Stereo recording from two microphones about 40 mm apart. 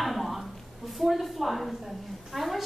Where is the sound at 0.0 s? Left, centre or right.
Centre.